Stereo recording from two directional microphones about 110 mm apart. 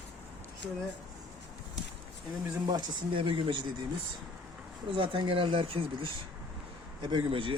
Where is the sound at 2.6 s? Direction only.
45° right (ahead or behind).